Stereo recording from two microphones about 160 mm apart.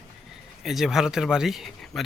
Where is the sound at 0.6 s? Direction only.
Centre (ahead or behind).